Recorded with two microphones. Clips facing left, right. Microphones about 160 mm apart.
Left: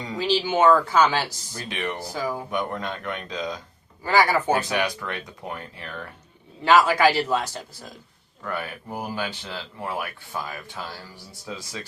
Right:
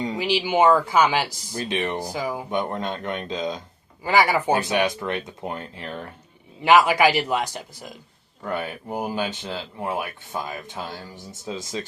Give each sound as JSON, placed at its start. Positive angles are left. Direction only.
{"t": 0.0, "sound": "speech", "side_deg": -20}